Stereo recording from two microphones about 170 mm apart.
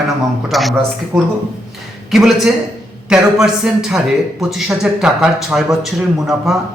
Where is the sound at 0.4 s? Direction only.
Centre (ahead or behind).